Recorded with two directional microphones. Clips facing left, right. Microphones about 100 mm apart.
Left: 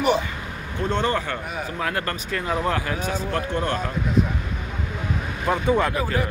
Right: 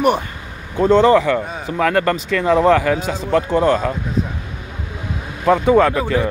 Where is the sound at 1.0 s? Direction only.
90° right.